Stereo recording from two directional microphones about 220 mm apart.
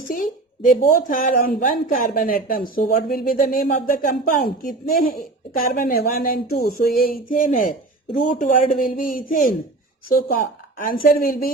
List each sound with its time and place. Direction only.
0.1 s a woman's voice: 40° left (ahead or behind)